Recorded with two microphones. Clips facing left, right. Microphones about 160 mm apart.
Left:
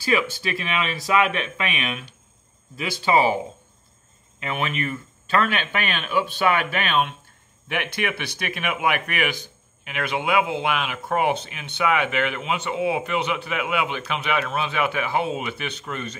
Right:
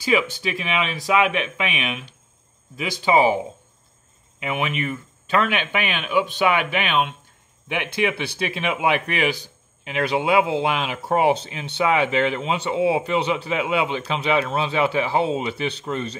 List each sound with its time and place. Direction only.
0.0 s speech: 20° right (ahead or behind)
4.4 s speech: 15° right (ahead or behind); by 16.2 s 30° right (ahead or behind)